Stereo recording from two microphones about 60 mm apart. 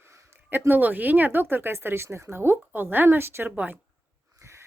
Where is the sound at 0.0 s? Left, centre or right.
Right.